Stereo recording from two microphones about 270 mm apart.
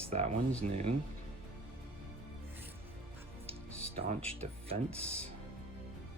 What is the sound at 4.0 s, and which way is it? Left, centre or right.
Speech, right.